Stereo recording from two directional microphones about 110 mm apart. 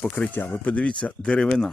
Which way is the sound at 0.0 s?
15° left (ahead or behind).